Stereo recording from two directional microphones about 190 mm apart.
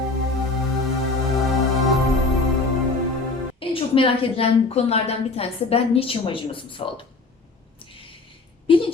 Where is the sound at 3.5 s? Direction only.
30° left (ahead or behind).